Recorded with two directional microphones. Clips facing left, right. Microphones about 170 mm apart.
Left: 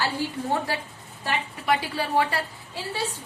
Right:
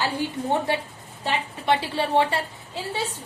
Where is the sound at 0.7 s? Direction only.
25° right (ahead or behind).